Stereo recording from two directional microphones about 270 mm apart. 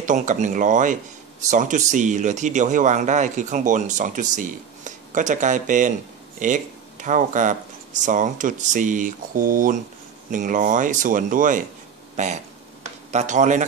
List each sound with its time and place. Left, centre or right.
0.0 s a man's voice: right